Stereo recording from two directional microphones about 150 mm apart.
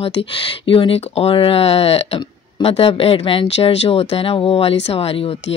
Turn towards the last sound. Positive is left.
turn(degrees=40)  # may be behind; listen again after turning